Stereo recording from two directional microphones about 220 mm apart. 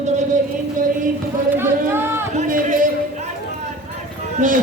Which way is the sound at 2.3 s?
35° right (ahead or behind).